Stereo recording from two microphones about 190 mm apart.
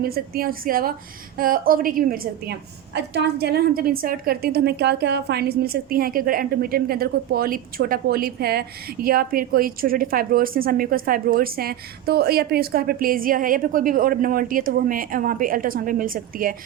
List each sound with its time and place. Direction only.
0.0 s a woman's voice: 50° right (ahead or behind)